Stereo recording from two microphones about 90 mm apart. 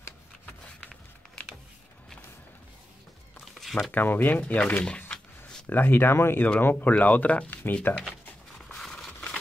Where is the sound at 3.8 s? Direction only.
20° left (ahead or behind).